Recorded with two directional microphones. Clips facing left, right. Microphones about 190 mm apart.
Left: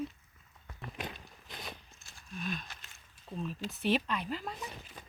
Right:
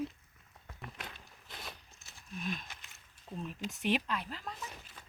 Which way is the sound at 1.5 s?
Centre (ahead or behind).